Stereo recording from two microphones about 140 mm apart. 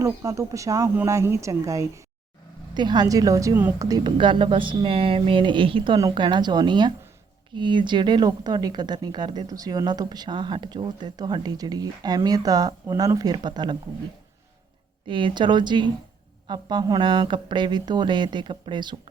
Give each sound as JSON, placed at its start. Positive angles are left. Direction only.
{"t": 0.0, "sound": "speech", "side_deg": -20}
{"t": 3.8, "sound": "a woman's voice", "side_deg": -30}
{"t": 15.0, "sound": "a woman's voice", "side_deg": -35}